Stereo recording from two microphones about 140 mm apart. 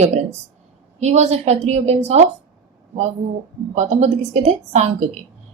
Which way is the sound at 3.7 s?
55° right (ahead or behind).